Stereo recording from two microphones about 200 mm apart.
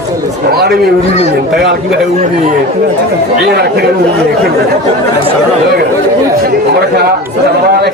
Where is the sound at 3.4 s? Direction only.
50° right (ahead or behind).